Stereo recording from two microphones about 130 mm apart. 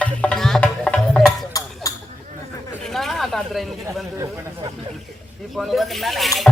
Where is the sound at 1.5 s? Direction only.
25° left (ahead or behind).